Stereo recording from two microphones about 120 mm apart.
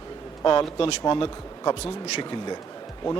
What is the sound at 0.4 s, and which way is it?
Speech, 35° left (ahead or behind).